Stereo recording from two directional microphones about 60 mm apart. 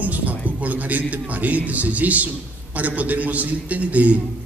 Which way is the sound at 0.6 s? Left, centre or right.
Right.